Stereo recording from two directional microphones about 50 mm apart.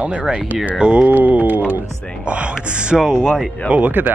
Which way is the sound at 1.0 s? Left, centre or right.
Right.